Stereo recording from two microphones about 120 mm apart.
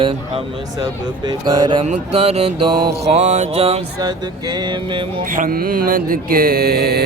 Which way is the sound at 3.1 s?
75° right (ahead or behind).